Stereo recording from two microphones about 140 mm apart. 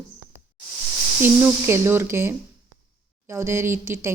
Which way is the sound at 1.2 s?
15° right (ahead or behind).